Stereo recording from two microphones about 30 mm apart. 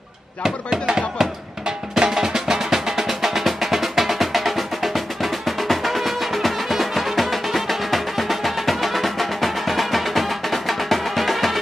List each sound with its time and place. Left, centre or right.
0.8 s speech: centre
2.0 s music: centre